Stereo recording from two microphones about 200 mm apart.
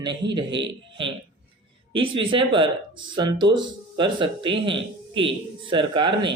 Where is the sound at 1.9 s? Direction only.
25° right (ahead or behind).